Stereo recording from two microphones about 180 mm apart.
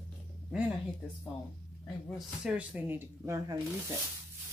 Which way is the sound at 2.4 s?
5° right (ahead or behind).